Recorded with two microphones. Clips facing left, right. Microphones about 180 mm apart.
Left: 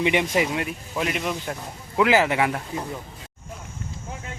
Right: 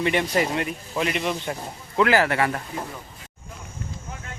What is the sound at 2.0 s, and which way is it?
Speech, 15° left (ahead or behind).